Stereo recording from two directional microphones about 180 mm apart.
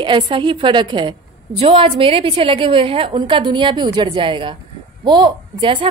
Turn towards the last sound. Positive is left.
turn(degrees=-25)  # may be behind; listen again after turning